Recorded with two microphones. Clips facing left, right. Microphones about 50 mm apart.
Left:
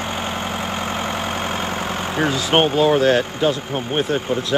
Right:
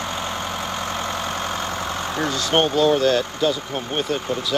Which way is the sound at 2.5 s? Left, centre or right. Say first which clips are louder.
Left 2 dB; left.